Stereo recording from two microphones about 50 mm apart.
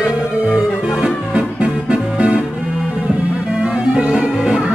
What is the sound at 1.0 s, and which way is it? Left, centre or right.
Music, right.